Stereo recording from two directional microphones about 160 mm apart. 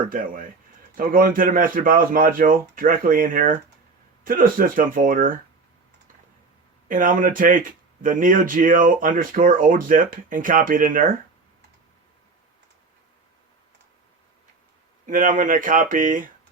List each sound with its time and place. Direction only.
0.1 s speech: 60° right (ahead or behind)
6.8 s speech: 60° right (ahead or behind)
15.0 s speech: 55° right (ahead or behind)